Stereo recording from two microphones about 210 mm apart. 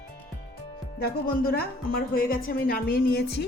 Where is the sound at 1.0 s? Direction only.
45° left (ahead or behind).